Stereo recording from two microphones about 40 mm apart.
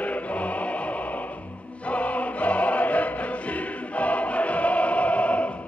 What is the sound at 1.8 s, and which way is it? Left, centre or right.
Music, left.